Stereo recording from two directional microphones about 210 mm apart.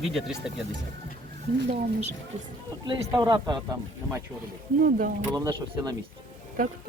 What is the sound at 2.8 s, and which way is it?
Speech, 20° right (ahead or behind).